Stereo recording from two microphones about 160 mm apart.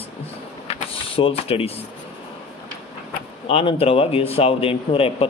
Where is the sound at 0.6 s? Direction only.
35° left (ahead or behind).